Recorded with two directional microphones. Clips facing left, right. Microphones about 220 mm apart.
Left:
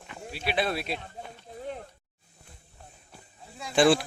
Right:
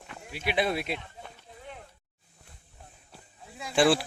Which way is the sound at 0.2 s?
35° left (ahead or behind).